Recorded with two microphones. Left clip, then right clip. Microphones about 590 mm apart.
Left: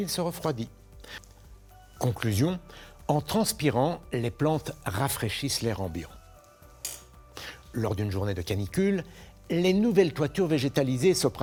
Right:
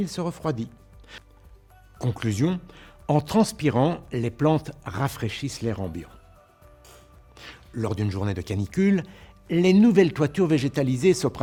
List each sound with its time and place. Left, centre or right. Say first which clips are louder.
0.0 s speech: right 1 dB; right
3.1 s speech: right 4 dB; right
7.3 s speech: even; right